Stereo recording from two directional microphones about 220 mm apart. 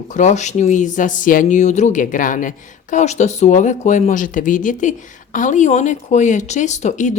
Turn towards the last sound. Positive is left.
turn(degrees=35)  # may be behind; listen again after turning